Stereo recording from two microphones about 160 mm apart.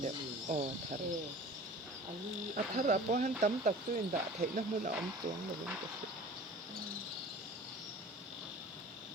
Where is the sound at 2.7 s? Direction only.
55° right (ahead or behind).